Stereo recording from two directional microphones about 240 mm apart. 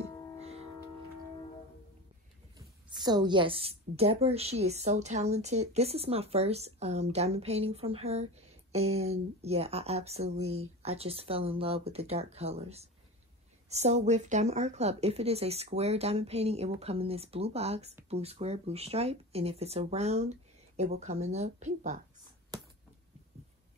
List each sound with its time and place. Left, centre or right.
0.4 s music: right
2.9 s a woman's voice: centre
22.5 s a sound: centre